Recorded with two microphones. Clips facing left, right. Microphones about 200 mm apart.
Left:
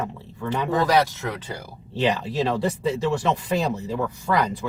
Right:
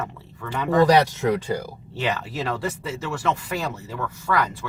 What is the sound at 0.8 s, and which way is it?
Speech, 15° right (ahead or behind).